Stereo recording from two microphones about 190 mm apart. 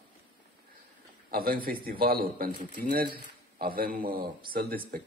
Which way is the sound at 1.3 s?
50° right (ahead or behind).